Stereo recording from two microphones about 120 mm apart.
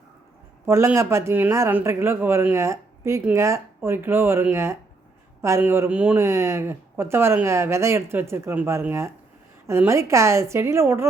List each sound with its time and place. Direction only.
0.7 s speech: 20° right (ahead or behind)
6.1 s speech: 25° right (ahead or behind)